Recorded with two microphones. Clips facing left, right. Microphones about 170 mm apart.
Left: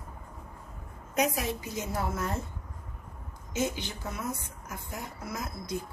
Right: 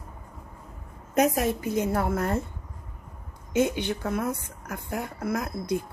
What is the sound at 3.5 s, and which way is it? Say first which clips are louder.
Speech: right 7 dB; 60° right (ahead or behind).